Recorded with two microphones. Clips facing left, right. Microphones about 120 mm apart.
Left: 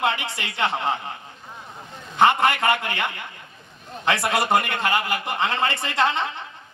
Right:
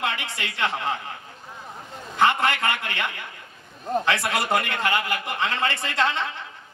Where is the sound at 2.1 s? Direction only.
20° left (ahead or behind).